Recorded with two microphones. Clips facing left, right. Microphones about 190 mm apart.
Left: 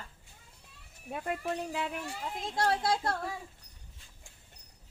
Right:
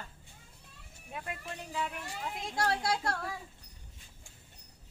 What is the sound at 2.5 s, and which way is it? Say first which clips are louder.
Speech: left 3 dB; 25° left (ahead or behind).